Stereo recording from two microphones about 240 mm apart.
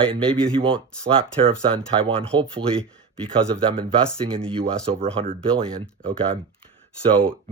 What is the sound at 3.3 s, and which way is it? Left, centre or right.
Speech, right.